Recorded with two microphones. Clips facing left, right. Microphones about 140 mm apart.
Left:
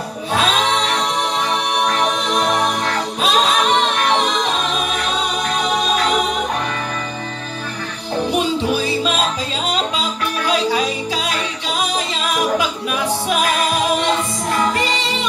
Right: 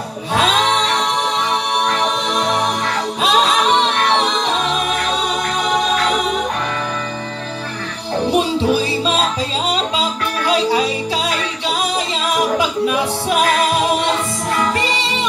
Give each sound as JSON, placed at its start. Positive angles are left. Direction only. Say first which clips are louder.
{"t": 8.3, "sound": "music", "louder": "right 3 dB", "side_deg": -30}